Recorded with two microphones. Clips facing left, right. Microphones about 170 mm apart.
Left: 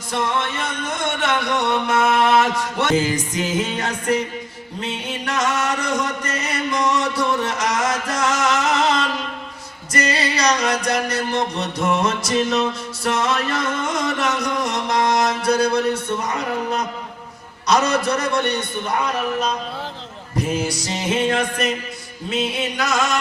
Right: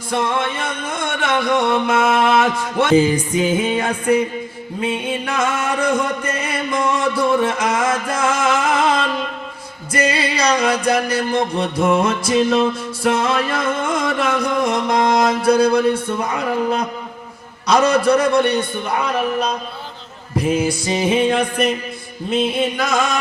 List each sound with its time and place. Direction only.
0.1 s music: 50° right (ahead or behind)
13.7 s carnatic music: 55° right (ahead or behind)
14.6 s music: 55° right (ahead or behind)
20.3 s music: 55° right (ahead or behind)
22.3 s music: 55° right (ahead or behind)